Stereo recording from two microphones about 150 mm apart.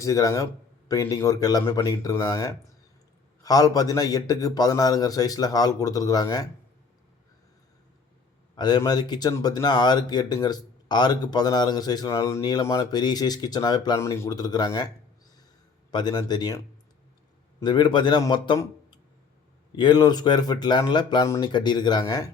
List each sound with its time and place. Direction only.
0.0 s speech: 20° left (ahead or behind)
8.5 s speech: 30° left (ahead or behind)
17.6 s a man's voice: 30° left (ahead or behind)
19.7 s speech: 30° left (ahead or behind)